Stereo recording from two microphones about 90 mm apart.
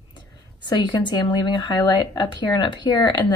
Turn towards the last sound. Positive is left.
turn(degrees=55)  # may be behind; listen again after turning